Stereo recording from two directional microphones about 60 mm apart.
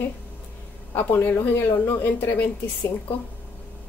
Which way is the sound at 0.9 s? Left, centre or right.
Left.